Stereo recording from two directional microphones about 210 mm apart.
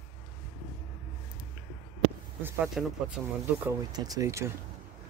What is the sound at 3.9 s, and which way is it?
Speech, 15° right (ahead or behind).